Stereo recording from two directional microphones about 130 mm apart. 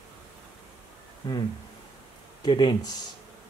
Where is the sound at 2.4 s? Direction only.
35° left (ahead or behind).